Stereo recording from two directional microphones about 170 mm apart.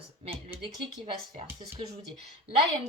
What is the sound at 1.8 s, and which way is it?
Speech, 30° right (ahead or behind).